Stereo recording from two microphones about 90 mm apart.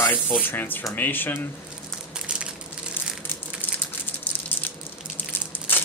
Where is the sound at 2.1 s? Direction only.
10° right (ahead or behind).